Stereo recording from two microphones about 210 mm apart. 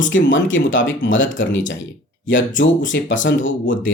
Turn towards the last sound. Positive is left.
turn(degrees=65)  # may be behind; listen again after turning